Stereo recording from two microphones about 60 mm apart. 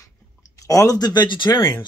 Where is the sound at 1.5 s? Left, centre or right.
Left.